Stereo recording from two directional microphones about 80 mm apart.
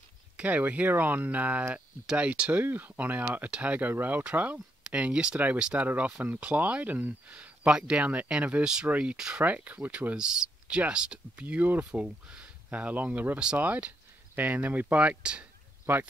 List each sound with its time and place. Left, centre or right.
0.4 s speech: centre
15.8 s speech: right